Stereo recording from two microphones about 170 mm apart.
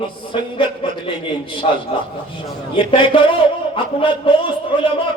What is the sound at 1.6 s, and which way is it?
A man's voice, 35° left (ahead or behind).